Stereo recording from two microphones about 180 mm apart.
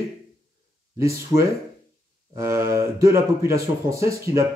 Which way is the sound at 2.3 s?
15° right (ahead or behind).